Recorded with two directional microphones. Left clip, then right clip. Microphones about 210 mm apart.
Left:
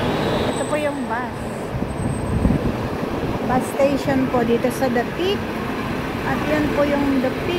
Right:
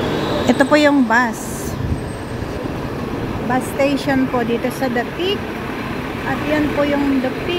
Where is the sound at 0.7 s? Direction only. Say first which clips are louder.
Right 9 dB; 30° right (ahead or behind).